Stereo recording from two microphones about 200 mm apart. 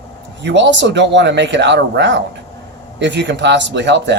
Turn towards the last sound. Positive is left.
turn(degrees=-60)  # may be behind; listen again after turning